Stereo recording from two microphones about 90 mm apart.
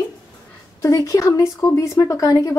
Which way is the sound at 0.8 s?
35° left (ahead or behind).